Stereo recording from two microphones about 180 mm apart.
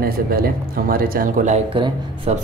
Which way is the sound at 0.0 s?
55° right (ahead or behind).